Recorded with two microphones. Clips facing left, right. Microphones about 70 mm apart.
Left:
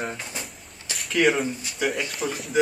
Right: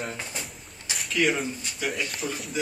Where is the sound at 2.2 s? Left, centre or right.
Left.